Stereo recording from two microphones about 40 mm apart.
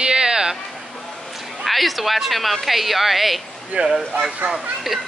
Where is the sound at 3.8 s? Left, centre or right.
Right.